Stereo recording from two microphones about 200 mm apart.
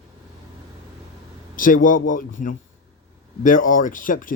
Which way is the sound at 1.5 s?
45° left (ahead or behind).